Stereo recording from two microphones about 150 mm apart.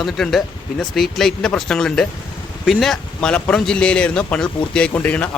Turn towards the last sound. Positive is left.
turn(degrees=10)  # may be behind; listen again after turning